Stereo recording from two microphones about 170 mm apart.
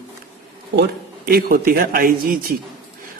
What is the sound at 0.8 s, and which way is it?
Speech, 65° right (ahead or behind).